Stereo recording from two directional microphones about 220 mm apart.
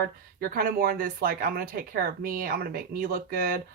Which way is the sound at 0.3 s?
40° right (ahead or behind).